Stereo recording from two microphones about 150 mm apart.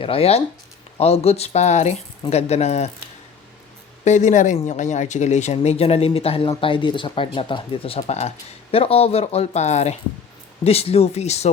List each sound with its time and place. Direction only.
0.0 s speech: 40° left (ahead or behind)
4.0 s speech: 55° left (ahead or behind)